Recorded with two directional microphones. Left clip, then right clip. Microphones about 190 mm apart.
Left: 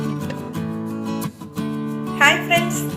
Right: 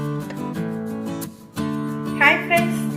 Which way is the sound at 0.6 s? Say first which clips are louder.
Even; centre (ahead or behind).